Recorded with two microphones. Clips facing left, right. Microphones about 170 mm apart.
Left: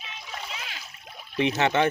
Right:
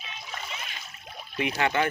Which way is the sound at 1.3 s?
25° left (ahead or behind).